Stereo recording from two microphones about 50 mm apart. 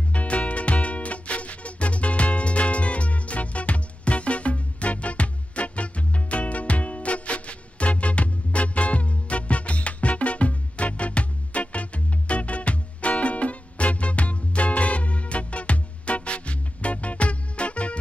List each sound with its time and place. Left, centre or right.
0.1 s music: left